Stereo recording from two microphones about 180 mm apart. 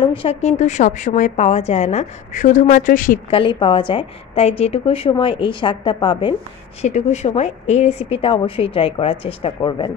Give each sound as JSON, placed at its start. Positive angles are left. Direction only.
{"t": 0.1, "sound": "a woman's voice", "side_deg": 30}
{"t": 3.3, "sound": "a woman's voice", "side_deg": 30}
{"t": 6.8, "sound": "a woman's voice", "side_deg": 40}